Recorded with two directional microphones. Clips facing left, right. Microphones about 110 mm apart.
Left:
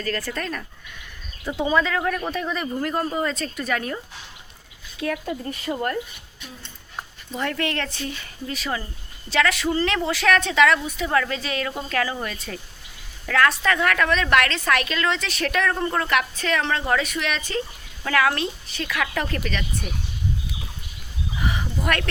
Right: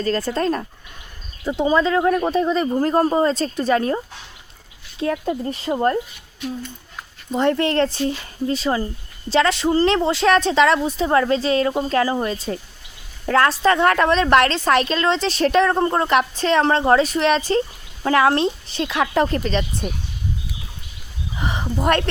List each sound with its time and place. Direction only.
0.0 s a woman's voice: 30° right (ahead or behind)
7.3 s a woman's voice: 30° right (ahead or behind)
21.3 s a sound: 30° right (ahead or behind)